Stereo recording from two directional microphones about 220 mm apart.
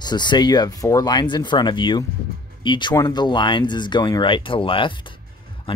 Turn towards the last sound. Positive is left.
turn(degrees=25)  # may be behind; listen again after turning